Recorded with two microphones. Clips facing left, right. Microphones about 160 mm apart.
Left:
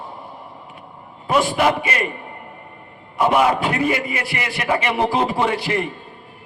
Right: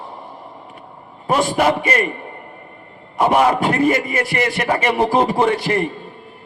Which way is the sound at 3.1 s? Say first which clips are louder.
Right 2 dB; 45° right (ahead or behind).